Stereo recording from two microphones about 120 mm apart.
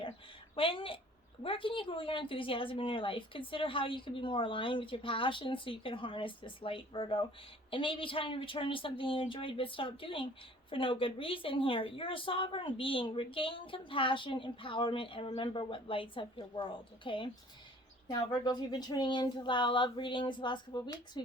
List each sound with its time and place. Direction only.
0.5 s speech: 50° left (ahead or behind)